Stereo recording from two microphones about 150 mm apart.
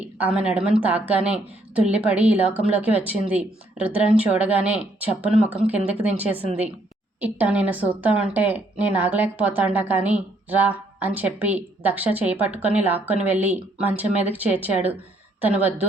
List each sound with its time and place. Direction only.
0.2 s a woman's voice: 10° right (ahead or behind)
6.4 s a woman's voice: 40° right (ahead or behind)
7.2 s a woman's voice: 10° right (ahead or behind)